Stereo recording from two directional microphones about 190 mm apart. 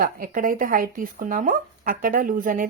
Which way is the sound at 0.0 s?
45° right (ahead or behind).